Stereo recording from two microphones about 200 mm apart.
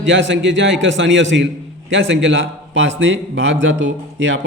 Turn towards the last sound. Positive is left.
turn(degrees=-70)  # may be behind; listen again after turning